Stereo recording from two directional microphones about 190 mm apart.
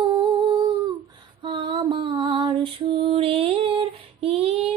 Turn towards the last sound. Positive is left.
turn(degrees=-30)  # may be behind; listen again after turning